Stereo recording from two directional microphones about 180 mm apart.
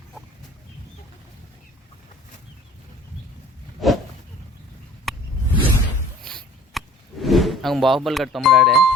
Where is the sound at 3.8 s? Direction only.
Centre (ahead or behind).